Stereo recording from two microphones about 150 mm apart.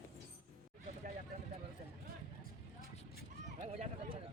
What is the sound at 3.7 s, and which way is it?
Run, 40° right (ahead or behind).